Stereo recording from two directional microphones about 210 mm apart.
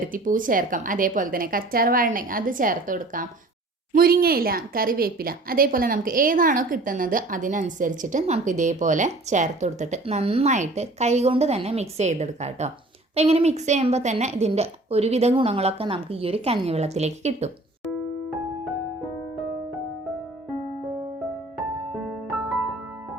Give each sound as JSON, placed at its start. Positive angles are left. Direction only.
{"t": 0.1, "sound": "a woman's voice", "side_deg": -40}